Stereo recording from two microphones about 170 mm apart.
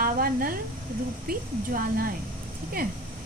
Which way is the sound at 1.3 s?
60° right (ahead or behind).